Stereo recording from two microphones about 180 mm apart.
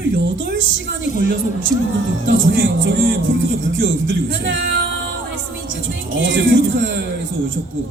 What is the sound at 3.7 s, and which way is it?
Speech, 90° right.